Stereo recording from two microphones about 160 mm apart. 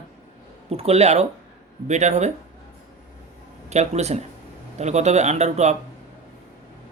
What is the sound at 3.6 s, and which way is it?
Speech, 45° right (ahead or behind).